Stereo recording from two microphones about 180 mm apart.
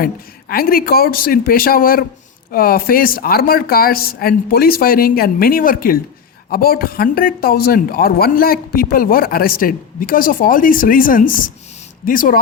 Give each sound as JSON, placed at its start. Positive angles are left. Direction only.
{"t": 0.0, "sound": "speech", "side_deg": 55}